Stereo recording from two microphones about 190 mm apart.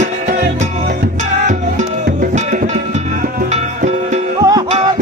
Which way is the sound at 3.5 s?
40° right (ahead or behind).